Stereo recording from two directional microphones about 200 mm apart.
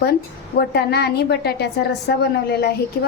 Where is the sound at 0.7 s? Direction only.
55° left (ahead or behind).